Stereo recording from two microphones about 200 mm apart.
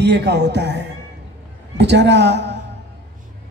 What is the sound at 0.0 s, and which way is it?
A woman's voice, 60° right (ahead or behind).